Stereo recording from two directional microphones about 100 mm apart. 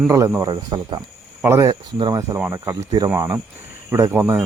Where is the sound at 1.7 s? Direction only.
50° right (ahead or behind).